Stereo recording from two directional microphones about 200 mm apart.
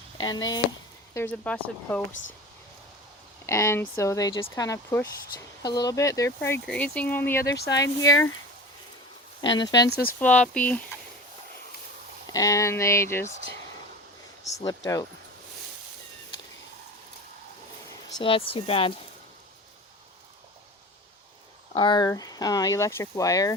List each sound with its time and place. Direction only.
0.2 s speech: 20° left (ahead or behind)
1.1 s speech: 10° left (ahead or behind)
2.2 s speech: 65° left (ahead or behind)
3.4 s speech: 15° left (ahead or behind)
9.5 s speech: 20° left (ahead or behind)
9.9 s speech: 50° left (ahead or behind)
10.2 s speech: 5° left (ahead or behind)
12.3 s speech: 15° left (ahead or behind)
14.4 s speech: 15° left (ahead or behind)
18.2 s speech: 25° left (ahead or behind)
21.8 s speech: 20° left (ahead or behind)